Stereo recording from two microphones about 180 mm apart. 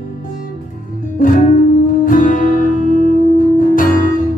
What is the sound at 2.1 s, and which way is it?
Music, 50° left (ahead or behind).